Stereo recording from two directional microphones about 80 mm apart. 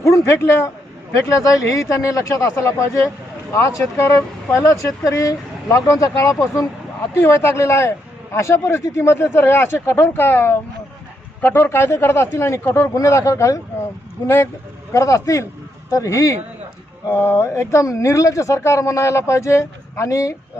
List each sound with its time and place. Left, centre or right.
0.0 s a man's voice: left
1.1 s a man's voice: left
12.9 s speech: left
14.3 s a man's voice: left
17.1 s a man's voice: left